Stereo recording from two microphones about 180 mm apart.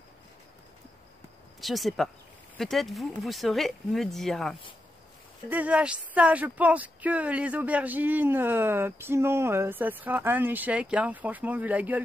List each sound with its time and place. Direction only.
1.6 s speech: centre (ahead or behind)